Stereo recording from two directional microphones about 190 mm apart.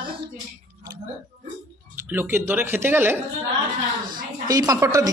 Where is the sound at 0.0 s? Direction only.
25° right (ahead or behind).